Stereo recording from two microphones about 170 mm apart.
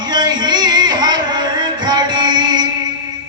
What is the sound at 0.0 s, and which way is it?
Music, 25° right (ahead or behind).